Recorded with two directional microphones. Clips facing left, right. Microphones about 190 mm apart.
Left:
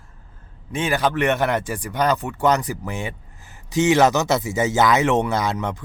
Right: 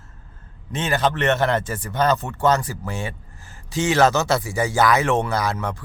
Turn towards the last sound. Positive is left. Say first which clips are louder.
# left 1 dB
turn(degrees=20)  # may be behind; listen again after turning